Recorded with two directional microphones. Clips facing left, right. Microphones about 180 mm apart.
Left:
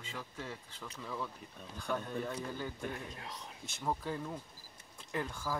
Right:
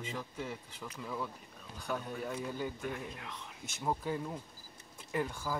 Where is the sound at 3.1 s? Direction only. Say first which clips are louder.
Even; 35° left (ahead or behind).